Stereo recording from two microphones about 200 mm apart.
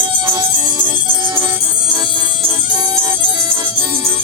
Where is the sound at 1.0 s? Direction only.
25° right (ahead or behind).